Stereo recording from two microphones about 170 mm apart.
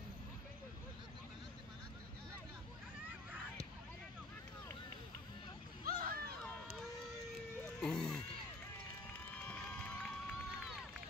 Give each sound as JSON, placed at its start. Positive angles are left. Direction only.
{"t": 5.9, "sound": "a sound", "side_deg": -60}
{"t": 7.8, "sound": "music", "side_deg": 5}
{"t": 9.3, "sound": "run", "side_deg": 10}